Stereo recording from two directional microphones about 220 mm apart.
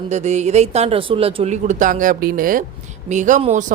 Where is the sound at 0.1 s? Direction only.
30° right (ahead or behind).